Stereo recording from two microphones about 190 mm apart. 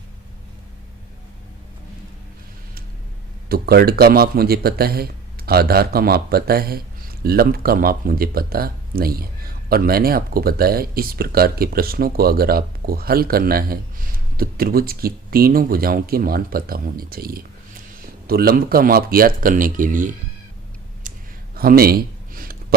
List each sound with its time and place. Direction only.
3.5 s speech: 55° right (ahead or behind)
21.0 s clicking: 45° right (ahead or behind)
21.5 s a sound: 50° right (ahead or behind)